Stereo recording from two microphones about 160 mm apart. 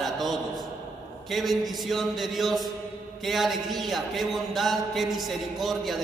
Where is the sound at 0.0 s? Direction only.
Centre (ahead or behind).